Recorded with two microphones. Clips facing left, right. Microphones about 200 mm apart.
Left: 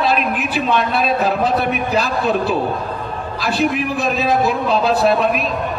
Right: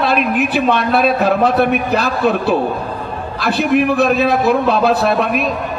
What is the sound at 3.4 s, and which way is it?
A man's voice, 60° right (ahead or behind).